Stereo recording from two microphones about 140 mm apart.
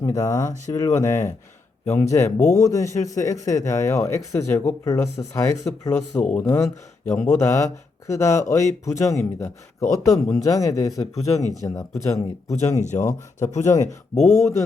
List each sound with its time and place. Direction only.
0.0 s a man's voice: 25° left (ahead or behind)
12.8 s a man's voice: 55° left (ahead or behind)